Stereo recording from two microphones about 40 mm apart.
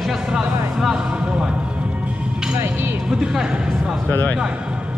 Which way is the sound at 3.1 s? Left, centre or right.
Centre.